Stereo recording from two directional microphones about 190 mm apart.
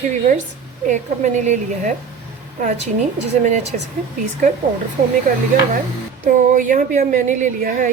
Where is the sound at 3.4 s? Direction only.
40° right (ahead or behind).